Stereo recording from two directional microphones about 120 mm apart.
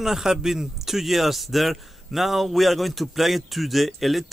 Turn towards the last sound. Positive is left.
turn(degrees=0)  # may be behind; listen again after turning